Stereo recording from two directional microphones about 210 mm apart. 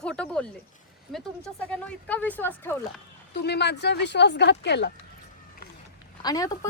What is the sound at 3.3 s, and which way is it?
Speech, 50° left (ahead or behind).